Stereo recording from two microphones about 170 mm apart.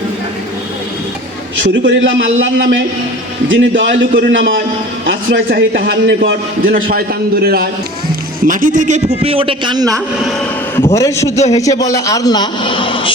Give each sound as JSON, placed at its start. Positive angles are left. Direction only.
{"t": 1.8, "sound": "a man's voice", "side_deg": -90}
{"t": 5.0, "sound": "a man's voice", "side_deg": -80}
{"t": 8.4, "sound": "speech", "side_deg": -50}
{"t": 9.2, "sound": "a man's voice", "side_deg": -30}
{"t": 10.8, "sound": "a man's voice", "side_deg": 15}